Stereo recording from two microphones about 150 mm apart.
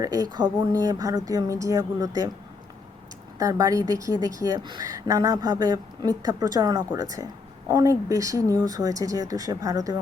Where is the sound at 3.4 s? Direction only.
20° right (ahead or behind).